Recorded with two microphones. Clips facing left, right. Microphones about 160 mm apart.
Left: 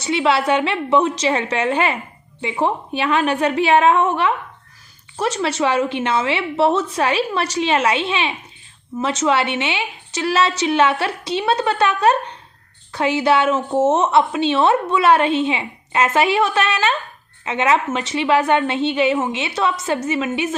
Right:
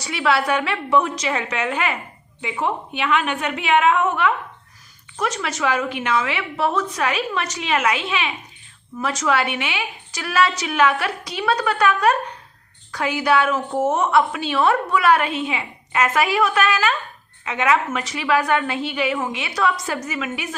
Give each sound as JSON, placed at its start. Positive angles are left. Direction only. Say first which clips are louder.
{"t": 0.0, "sound": "a woman's voice", "louder": "left 3 dB", "side_deg": 25}